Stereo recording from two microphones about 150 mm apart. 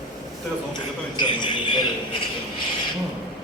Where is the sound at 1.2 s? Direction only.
30° left (ahead or behind).